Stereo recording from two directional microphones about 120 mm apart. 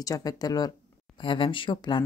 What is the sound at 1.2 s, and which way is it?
Speech, 45° left (ahead or behind).